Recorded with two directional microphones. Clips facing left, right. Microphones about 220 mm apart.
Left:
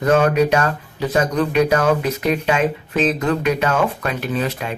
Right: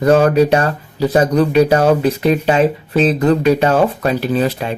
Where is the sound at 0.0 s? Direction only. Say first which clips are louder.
Right 4 dB; 35° right (ahead or behind).